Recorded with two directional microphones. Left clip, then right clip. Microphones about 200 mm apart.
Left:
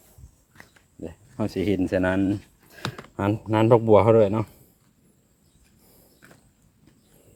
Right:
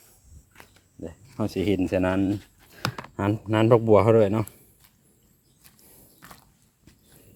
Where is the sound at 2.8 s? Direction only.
45° right (ahead or behind).